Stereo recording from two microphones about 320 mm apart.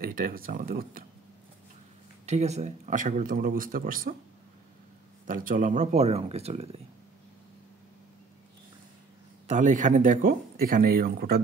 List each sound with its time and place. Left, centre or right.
0.0 s speech: right
2.2 s speech: centre
5.2 s speech: right
9.5 s speech: right